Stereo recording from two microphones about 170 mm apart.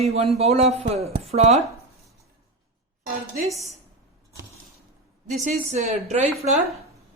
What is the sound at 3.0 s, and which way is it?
Speech, 45° right (ahead or behind).